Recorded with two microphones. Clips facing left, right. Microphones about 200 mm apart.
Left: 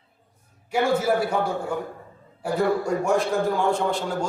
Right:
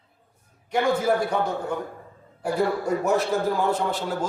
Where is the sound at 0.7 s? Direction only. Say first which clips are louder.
Even; 5° left (ahead or behind).